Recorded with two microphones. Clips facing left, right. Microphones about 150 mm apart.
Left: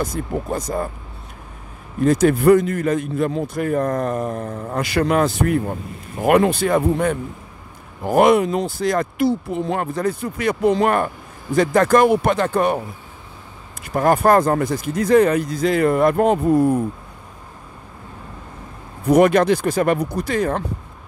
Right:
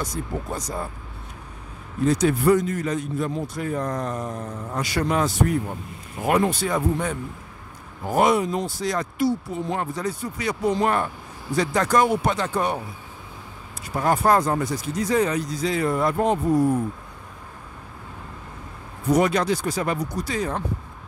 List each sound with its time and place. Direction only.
0.6 s speech: 55° left (ahead or behind)
2.0 s speech: 55° left (ahead or behind)
13.9 s speech: 55° left (ahead or behind)
19.0 s speech: 55° left (ahead or behind)